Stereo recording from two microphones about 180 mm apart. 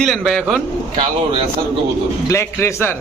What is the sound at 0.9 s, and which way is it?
Speech, 30° right (ahead or behind).